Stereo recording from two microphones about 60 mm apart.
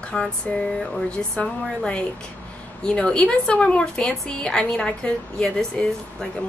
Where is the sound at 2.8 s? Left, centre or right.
Centre.